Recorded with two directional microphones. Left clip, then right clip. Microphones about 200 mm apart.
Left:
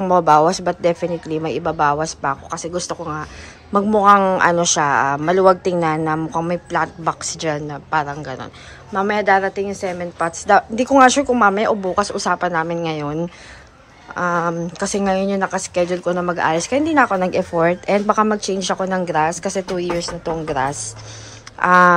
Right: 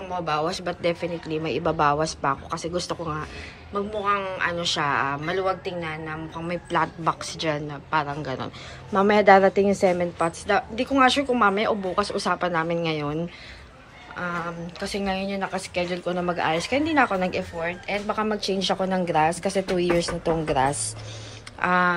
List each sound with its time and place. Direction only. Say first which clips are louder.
0.2 s speech: left 10 dB; 15° left (ahead or behind)
3.7 s a man's voice: left 13 dB; 15° left (ahead or behind)
6.4 s speech: left 5 dB; 5° left (ahead or behind)
10.5 s speech: left 12 dB; 10° left (ahead or behind)